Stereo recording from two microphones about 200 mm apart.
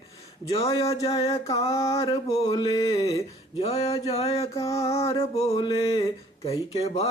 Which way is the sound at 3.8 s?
15° left (ahead or behind).